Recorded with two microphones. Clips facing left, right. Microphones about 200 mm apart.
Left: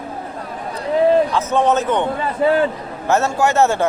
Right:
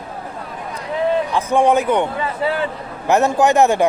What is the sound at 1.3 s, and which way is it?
Speech, 10° right (ahead or behind).